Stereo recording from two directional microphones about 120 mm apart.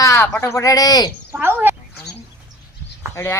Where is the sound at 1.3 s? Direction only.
15° right (ahead or behind).